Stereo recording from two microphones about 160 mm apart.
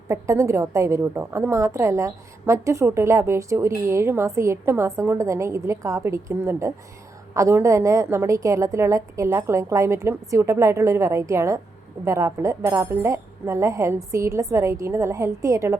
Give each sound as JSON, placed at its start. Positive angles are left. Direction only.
{"t": 0.1, "sound": "a woman's voice", "side_deg": -20}